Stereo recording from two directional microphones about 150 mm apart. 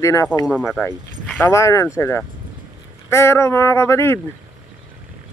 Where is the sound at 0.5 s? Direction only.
5° right (ahead or behind).